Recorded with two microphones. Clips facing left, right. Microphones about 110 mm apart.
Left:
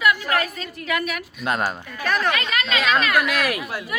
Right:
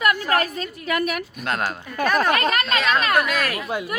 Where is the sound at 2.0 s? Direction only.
55° right (ahead or behind).